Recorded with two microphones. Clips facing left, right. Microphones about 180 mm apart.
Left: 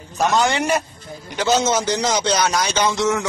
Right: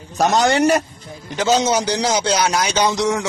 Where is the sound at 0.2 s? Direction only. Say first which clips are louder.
Right 3 dB; 40° right (ahead or behind).